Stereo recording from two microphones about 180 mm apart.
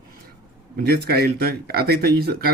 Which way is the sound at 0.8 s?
60° right (ahead or behind).